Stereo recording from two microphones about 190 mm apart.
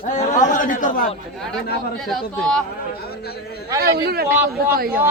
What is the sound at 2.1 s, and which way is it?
Speech, 5° left (ahead or behind).